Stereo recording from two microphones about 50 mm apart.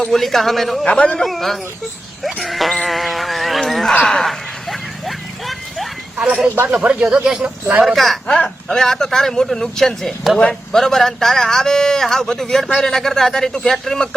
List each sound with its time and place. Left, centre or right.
0.1 s a man's voice: centre
0.9 s a man's voice: centre
1.2 s a man's voice: centre
2.8 s insect: centre
3.6 s a man's voice: centre
4.0 s horse: centre
6.1 s speech: right
7.9 s a man's voice: centre
8.3 s a man's voice: centre
10.3 s speech: centre
10.8 s a man's voice: centre